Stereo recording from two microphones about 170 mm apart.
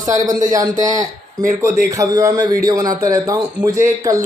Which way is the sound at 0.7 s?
45° right (ahead or behind).